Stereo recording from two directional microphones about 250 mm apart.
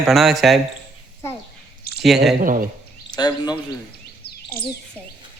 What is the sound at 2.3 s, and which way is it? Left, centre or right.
Speech, right.